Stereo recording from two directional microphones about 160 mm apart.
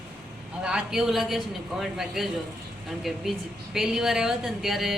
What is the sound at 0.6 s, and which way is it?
Speech, 5° right (ahead or behind).